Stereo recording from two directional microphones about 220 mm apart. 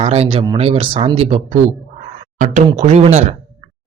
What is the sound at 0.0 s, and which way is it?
Speech, 25° right (ahead or behind).